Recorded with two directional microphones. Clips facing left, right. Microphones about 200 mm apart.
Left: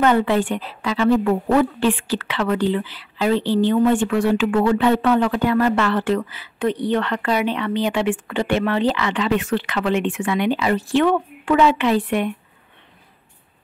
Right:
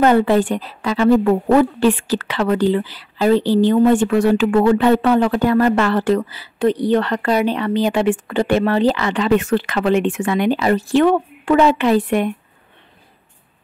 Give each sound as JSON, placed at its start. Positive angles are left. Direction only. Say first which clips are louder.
{"t": 0.0, "sound": "a woman's voice", "louder": "right 4 dB", "side_deg": -40}